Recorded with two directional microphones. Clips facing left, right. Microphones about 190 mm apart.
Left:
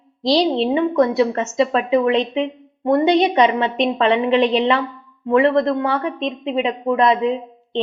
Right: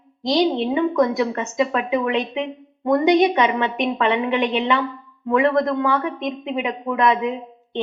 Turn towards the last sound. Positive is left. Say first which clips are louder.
# left 3 dB
turn(degrees=30)  # may be behind; listen again after turning